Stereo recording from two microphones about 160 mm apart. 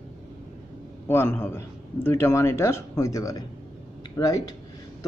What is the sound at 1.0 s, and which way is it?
Speech, 15° left (ahead or behind).